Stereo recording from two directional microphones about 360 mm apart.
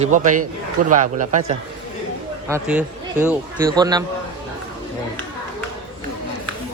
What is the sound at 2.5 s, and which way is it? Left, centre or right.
A man's voice, centre.